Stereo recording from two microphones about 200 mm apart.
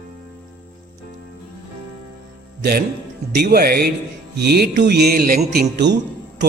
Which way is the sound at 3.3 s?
50° right (ahead or behind).